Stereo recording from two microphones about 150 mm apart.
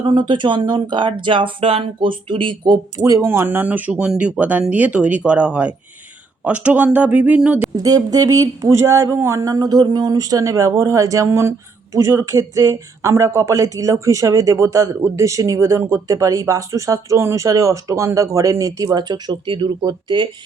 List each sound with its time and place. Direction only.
0.0 s speech: 30° right (ahead or behind)
3.0 s speech: 20° right (ahead or behind)
7.8 s speech: 25° right (ahead or behind)